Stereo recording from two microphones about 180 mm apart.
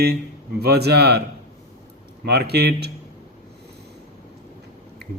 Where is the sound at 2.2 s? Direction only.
65° right (ahead or behind).